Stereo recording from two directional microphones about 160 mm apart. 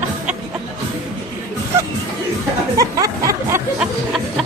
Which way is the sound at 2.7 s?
20° right (ahead or behind).